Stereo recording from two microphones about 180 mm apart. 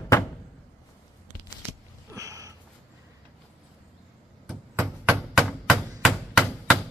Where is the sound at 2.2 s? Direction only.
20° right (ahead or behind).